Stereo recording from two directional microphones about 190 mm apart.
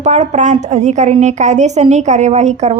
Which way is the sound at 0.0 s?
35° right (ahead or behind).